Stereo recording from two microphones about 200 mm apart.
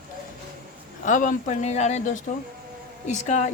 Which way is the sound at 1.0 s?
40° left (ahead or behind).